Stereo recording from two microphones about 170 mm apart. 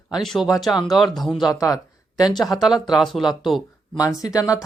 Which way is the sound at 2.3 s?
Centre (ahead or behind).